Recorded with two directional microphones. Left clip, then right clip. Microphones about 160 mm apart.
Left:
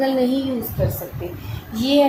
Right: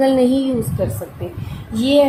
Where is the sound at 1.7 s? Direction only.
55° right (ahead or behind).